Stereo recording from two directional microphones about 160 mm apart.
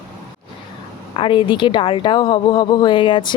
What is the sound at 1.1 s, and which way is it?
A woman's voice, 35° left (ahead or behind).